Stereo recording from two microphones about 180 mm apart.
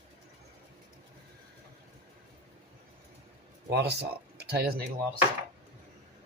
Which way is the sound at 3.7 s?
65° right (ahead or behind).